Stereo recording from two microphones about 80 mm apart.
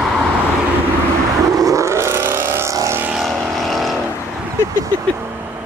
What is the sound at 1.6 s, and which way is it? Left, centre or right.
Vehicle, right.